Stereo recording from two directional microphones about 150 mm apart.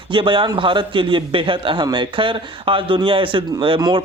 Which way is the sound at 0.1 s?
35° right (ahead or behind).